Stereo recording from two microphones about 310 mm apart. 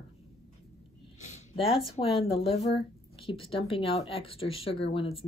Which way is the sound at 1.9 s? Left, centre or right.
Centre.